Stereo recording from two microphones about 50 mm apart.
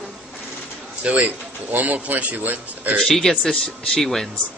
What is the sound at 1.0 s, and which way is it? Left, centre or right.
Speech, right.